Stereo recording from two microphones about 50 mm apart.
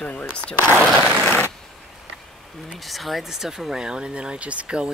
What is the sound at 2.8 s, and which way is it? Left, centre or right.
Speech, centre.